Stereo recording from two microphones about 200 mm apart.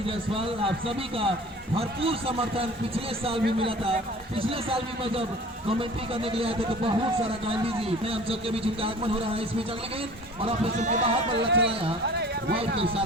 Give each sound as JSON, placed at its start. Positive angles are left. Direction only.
{"t": 0.3, "sound": "a man's voice", "side_deg": -25}
{"t": 10.4, "sound": "a man's voice", "side_deg": -30}
{"t": 11.3, "sound": "speech", "side_deg": -60}
{"t": 11.7, "sound": "a man's voice", "side_deg": -30}